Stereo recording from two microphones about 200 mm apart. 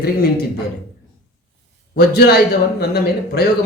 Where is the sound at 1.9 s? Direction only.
50° left (ahead or behind).